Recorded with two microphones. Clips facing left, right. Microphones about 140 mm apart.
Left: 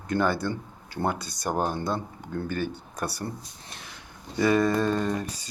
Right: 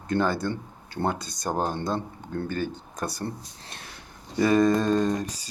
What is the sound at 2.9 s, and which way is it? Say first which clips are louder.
Speech: even; 20° right (ahead or behind).